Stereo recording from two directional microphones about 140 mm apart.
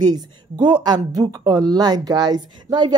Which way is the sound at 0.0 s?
30° right (ahead or behind).